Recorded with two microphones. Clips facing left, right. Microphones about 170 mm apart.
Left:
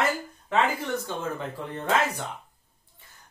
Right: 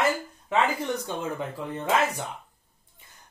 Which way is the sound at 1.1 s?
15° right (ahead or behind).